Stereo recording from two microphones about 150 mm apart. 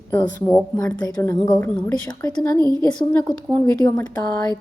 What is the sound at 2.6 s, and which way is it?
Speech, 30° right (ahead or behind).